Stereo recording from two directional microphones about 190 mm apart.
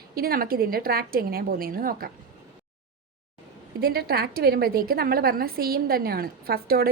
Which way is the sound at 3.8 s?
55° right (ahead or behind).